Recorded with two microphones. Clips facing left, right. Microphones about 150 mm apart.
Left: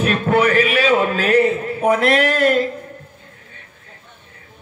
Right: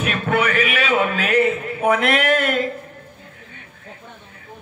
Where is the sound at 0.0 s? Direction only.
35° left (ahead or behind).